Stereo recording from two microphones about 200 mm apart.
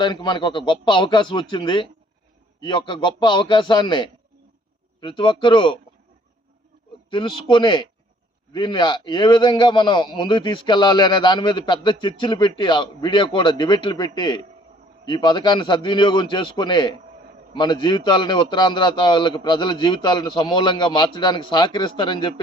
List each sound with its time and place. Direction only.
0.0 s a man's voice: 20° left (ahead or behind)
7.1 s a man's voice: 25° left (ahead or behind)